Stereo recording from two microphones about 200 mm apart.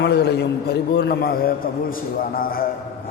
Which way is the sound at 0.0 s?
55° left (ahead or behind).